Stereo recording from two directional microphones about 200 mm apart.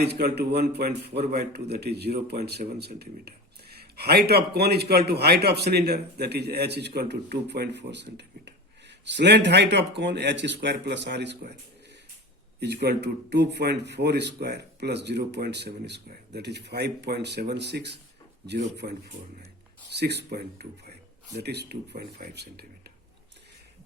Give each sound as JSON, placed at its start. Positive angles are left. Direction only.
{"t": 0.0, "sound": "a man's voice", "side_deg": -55}
{"t": 12.5, "sound": "a man's voice", "side_deg": -55}